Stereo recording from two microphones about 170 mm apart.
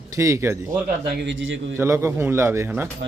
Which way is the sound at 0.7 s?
60° right (ahead or behind).